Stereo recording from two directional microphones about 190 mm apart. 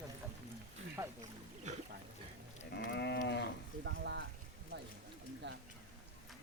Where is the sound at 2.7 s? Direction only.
60° left (ahead or behind).